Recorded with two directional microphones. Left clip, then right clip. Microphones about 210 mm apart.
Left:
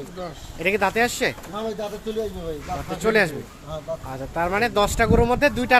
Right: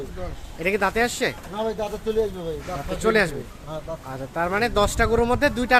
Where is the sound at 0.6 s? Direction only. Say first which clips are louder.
Left 1 dB; 5° left (ahead or behind).